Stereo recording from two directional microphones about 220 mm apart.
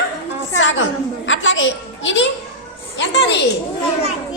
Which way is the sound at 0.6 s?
60° left (ahead or behind).